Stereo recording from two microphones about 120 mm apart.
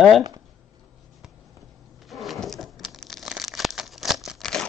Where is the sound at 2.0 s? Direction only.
Centre (ahead or behind).